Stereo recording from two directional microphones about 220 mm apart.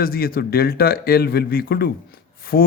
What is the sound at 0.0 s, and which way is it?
Speech, 40° left (ahead or behind).